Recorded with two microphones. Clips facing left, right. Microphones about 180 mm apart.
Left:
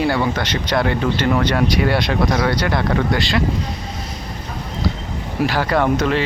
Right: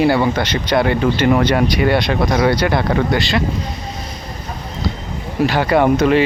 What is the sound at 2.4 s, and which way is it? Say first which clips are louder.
Speech: right 4 dB; 10° right (ahead or behind).